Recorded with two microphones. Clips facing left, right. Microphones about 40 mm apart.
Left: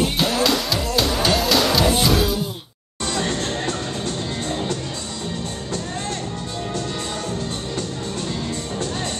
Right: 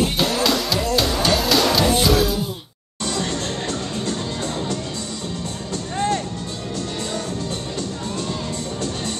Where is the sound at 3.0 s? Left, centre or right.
Left.